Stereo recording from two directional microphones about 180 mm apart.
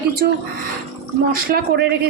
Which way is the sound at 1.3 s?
55° right (ahead or behind).